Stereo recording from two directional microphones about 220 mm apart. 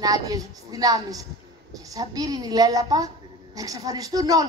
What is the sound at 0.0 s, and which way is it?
A woman's voice, 15° right (ahead or behind).